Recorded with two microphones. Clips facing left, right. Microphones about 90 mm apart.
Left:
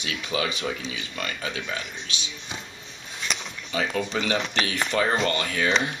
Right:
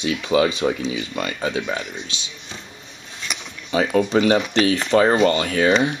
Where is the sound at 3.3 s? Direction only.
5° right (ahead or behind).